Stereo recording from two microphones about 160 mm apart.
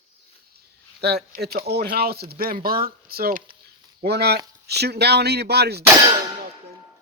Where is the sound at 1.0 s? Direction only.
90° right; by 3.6 s 65° right (ahead or behind).